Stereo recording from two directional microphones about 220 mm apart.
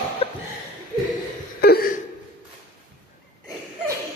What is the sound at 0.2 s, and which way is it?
Chuckle, 25° left (ahead or behind).